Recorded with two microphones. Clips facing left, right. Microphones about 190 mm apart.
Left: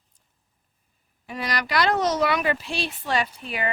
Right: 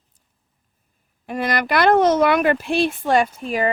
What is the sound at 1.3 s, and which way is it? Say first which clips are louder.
Speech: right 6 dB; 50° right (ahead or behind).